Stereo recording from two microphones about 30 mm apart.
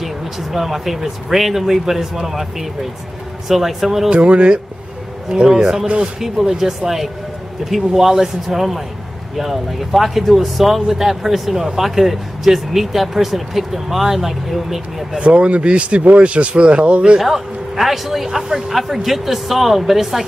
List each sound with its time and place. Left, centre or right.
0.0 s speech: centre
4.1 s speech: right
5.3 s a man's voice: right; by 15.0 s centre
15.1 s speech: right
17.2 s speech: centre